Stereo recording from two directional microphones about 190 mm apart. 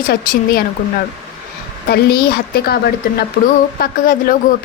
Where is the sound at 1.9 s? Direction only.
55° left (ahead or behind).